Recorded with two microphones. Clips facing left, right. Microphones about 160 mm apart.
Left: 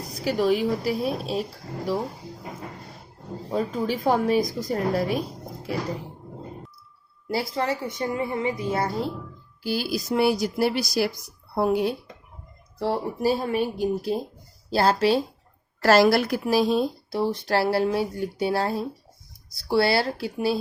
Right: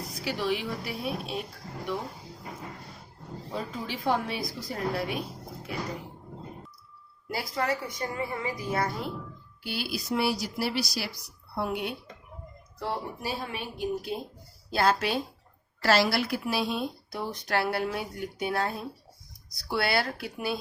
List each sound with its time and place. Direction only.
0.3 s speech: 40° left (ahead or behind)
3.5 s a woman's voice: 40° left (ahead or behind)
7.3 s a woman's voice: 30° left (ahead or behind)
9.9 s a woman's voice: 50° left (ahead or behind); by 15.2 s 30° left (ahead or behind)
15.8 s speech: 45° left (ahead or behind); by 20.6 s 30° left (ahead or behind)